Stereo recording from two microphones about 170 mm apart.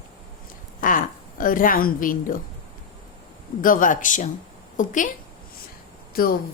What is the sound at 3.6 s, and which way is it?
A woman's voice, 50° left (ahead or behind).